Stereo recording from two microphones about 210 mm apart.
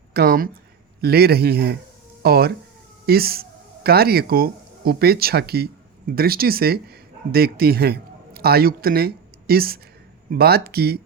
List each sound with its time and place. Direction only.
0.1 s speech: 45° right (ahead or behind)